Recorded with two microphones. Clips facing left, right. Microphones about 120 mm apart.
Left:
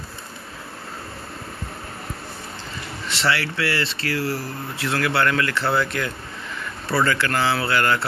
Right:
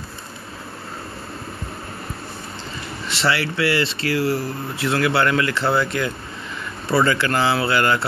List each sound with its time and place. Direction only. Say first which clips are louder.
3.1 s speech: right 2 dB; 10° right (ahead or behind)
4.7 s speech: right 3 dB; 10° right (ahead or behind)